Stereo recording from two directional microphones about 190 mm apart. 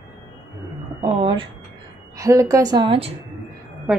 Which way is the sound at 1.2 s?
25° right (ahead or behind).